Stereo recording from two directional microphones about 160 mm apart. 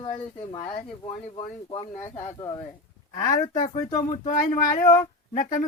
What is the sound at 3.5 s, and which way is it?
Speech, 50° left (ahead or behind).